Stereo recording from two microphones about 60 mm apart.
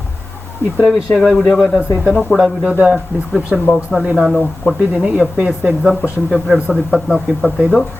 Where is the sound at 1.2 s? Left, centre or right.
Centre.